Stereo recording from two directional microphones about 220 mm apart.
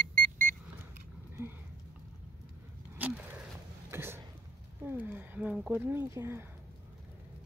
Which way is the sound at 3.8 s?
10° right (ahead or behind).